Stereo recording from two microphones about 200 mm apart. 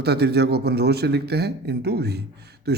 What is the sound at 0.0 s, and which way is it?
A man's voice, 55° right (ahead or behind).